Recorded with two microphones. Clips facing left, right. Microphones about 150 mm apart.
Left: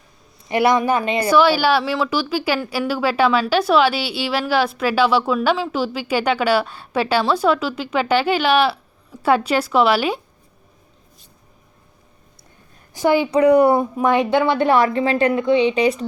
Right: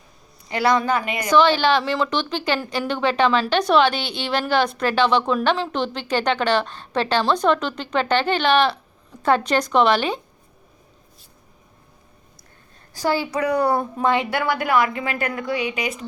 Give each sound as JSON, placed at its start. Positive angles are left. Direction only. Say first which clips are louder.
{"t": 0.4, "sound": "a woman's voice", "louder": "left 3 dB", "side_deg": 20}
{"t": 1.3, "sound": "a woman's voice", "louder": "left 1 dB", "side_deg": 10}
{"t": 12.9, "sound": "a woman's voice", "louder": "left 6 dB", "side_deg": 20}